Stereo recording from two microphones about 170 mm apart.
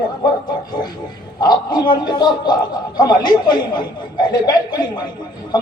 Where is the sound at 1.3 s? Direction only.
25° left (ahead or behind).